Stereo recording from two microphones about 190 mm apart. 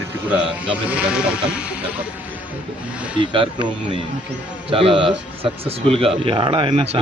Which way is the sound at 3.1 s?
25° right (ahead or behind).